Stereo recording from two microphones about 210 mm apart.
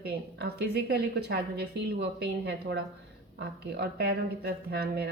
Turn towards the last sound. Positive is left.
turn(degrees=-50)  # may be behind; listen again after turning